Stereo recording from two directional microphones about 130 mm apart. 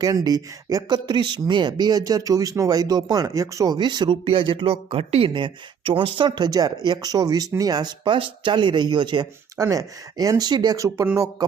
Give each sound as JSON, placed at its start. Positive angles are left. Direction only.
{"t": 0.0, "sound": "speech", "side_deg": -30}